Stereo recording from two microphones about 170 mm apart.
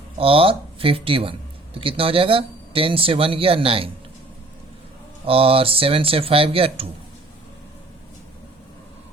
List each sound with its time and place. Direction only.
0.2 s speech: 35° right (ahead or behind)
5.2 s speech: 35° right (ahead or behind)